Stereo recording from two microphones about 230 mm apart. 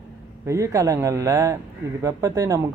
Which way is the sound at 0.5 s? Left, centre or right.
Centre.